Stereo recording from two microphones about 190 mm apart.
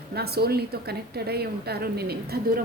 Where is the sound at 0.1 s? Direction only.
55° right (ahead or behind).